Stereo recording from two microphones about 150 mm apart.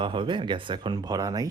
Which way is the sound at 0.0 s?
35° right (ahead or behind).